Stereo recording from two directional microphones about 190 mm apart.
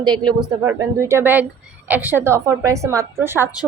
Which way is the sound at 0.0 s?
20° right (ahead or behind).